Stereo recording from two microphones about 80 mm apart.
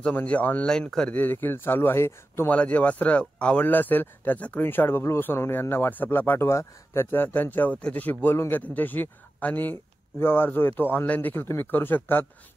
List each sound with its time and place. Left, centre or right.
0.1 s speech: centre
0.7 s speech: centre; by 2.5 s left
2.5 s speech: centre